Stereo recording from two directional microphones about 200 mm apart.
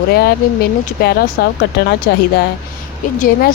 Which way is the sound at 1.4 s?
55° left (ahead or behind).